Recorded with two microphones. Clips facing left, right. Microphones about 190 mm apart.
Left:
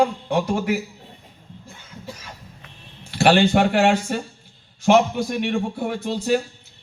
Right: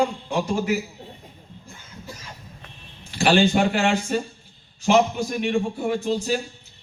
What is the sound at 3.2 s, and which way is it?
Speech, 60° left (ahead or behind).